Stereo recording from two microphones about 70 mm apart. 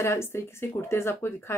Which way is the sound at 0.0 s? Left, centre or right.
Left.